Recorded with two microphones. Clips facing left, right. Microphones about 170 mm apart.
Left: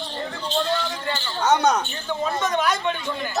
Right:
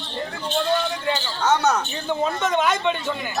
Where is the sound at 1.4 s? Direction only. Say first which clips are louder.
Left 1 dB; 10° left (ahead or behind).